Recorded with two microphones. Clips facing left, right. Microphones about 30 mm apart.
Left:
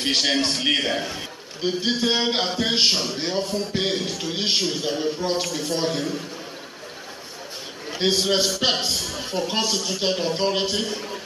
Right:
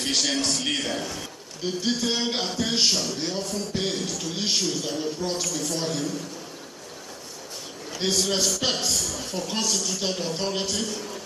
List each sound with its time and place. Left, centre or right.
0.0 s a man's voice: left
7.9 s a man's voice: left